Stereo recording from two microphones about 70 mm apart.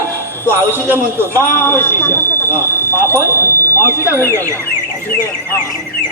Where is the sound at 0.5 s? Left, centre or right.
Right.